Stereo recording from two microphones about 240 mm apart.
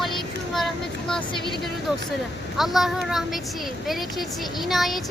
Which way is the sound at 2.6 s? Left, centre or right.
Centre.